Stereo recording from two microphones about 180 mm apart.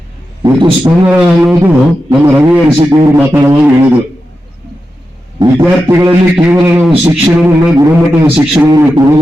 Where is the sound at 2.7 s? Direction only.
25° right (ahead or behind).